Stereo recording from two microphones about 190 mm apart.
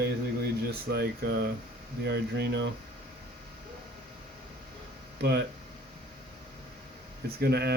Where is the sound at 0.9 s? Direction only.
60° right (ahead or behind).